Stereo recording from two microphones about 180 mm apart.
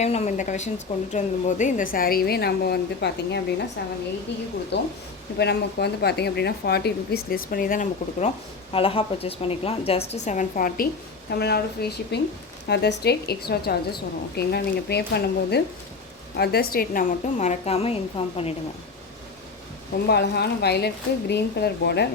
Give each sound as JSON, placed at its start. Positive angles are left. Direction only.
{"t": 0.0, "sound": "a woman's voice", "side_deg": 35}
{"t": 8.7, "sound": "a woman's voice", "side_deg": 30}
{"t": 11.3, "sound": "a woman's voice", "side_deg": 65}
{"t": 20.1, "sound": "a woman's voice", "side_deg": 65}